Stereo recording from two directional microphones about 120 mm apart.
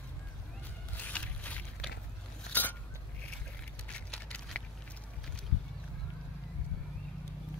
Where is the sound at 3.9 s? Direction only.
10° left (ahead or behind).